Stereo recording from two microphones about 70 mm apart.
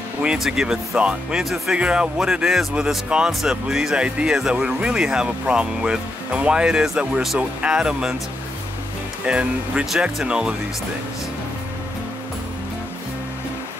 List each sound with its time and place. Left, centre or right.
0.4 s speech: centre
9.2 s speech: centre